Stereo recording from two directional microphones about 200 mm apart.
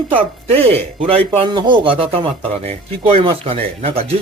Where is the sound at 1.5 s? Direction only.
20° right (ahead or behind).